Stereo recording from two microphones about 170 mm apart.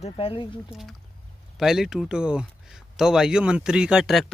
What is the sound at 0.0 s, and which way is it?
Speech, 30° left (ahead or behind).